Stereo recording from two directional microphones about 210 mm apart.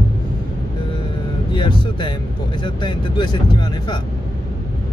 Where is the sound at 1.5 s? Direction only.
20° left (ahead or behind).